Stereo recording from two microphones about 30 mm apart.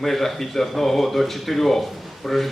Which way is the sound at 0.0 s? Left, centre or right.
Centre.